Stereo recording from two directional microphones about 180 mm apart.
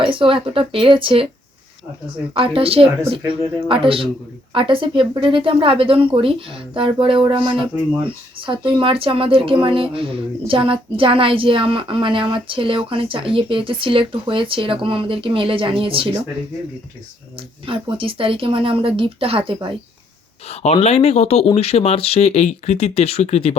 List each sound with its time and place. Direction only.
0.0 s speech: 30° right (ahead or behind)
2.3 s speech: 30° right (ahead or behind)
17.7 s speech: 30° right (ahead or behind)
20.5 s speech: 35° left (ahead or behind)